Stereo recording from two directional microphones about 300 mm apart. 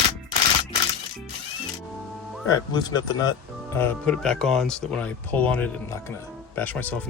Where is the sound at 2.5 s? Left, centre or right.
Centre.